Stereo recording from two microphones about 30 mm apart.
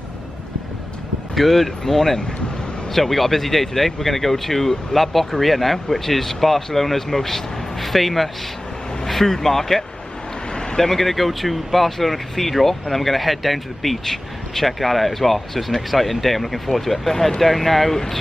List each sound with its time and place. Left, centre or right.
1.3 s speech: centre
1.9 s speech: centre
2.9 s speech: centre
10.5 s vehicle: left
10.8 s speech: centre
14.0 s speech: centre